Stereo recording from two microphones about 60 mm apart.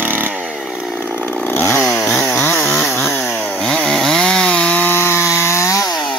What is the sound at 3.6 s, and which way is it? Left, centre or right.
Chainsaw, centre.